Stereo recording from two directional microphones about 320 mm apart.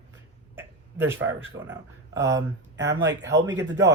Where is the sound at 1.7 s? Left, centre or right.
Centre.